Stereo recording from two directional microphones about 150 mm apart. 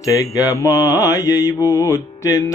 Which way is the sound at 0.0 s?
25° left (ahead or behind).